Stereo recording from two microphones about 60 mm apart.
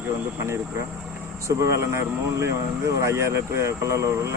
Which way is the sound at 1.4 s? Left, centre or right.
Right.